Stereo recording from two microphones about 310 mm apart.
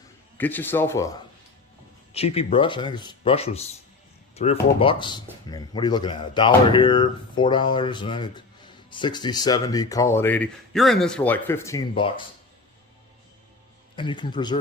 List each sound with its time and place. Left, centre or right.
0.3 s speech: centre
13.9 s speech: centre